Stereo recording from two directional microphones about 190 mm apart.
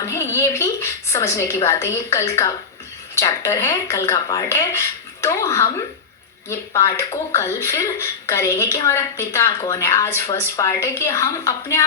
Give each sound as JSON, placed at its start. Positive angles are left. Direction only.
{"t": 0.0, "sound": "a woman's voice", "side_deg": 15}